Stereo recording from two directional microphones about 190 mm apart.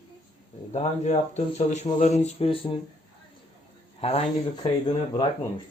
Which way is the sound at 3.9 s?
30° left (ahead or behind).